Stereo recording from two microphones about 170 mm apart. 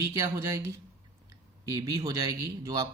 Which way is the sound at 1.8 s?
20° right (ahead or behind).